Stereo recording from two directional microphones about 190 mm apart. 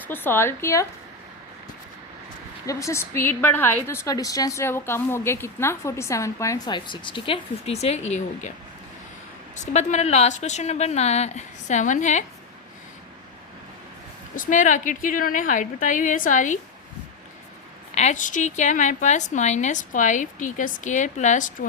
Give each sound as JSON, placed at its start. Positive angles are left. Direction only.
{"t": 0.1, "sound": "a woman's voice", "side_deg": 10}
{"t": 2.6, "sound": "a woman's voice", "side_deg": 15}
{"t": 9.6, "sound": "a woman's voice", "side_deg": 40}
{"t": 14.3, "sound": "a woman's voice", "side_deg": 40}
{"t": 17.9, "sound": "a woman's voice", "side_deg": 40}